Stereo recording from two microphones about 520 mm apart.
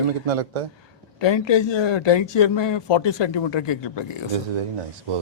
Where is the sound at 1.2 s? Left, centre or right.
Left.